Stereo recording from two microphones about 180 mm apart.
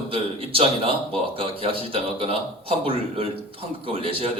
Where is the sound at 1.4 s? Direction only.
30° right (ahead or behind).